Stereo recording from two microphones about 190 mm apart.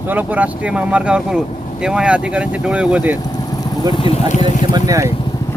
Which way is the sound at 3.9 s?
30° left (ahead or behind).